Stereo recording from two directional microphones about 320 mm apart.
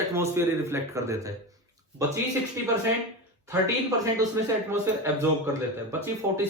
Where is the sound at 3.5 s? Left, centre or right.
Centre.